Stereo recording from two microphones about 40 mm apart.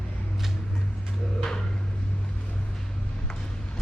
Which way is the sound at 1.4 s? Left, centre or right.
Centre.